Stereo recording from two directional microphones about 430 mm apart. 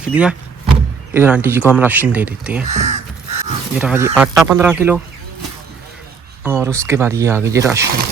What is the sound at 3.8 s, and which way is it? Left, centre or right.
Speech, centre.